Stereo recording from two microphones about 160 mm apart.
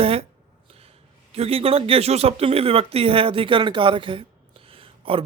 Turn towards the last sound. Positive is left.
turn(degrees=-35)  # may be behind; listen again after turning